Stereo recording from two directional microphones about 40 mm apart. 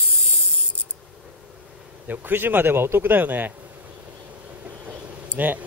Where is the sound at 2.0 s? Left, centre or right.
Right.